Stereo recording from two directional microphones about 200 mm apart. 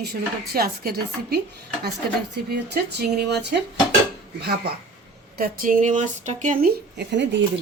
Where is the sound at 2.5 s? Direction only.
55° right (ahead or behind).